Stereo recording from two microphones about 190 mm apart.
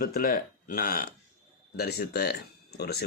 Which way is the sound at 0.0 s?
50° left (ahead or behind).